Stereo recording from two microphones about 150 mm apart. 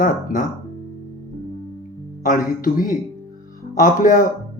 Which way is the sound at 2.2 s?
65° left (ahead or behind).